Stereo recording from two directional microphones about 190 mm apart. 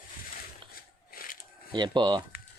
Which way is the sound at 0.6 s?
25° right (ahead or behind).